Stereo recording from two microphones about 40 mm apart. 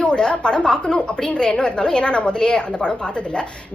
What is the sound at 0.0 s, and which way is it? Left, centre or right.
A woman's voice, left.